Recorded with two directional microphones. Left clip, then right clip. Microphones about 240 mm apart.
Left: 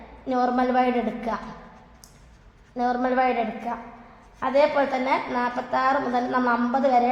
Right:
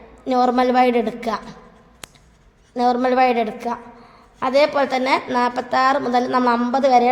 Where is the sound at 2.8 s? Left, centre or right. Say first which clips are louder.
Right 6 dB; right.